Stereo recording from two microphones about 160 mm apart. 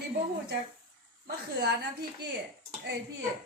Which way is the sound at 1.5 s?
90° right.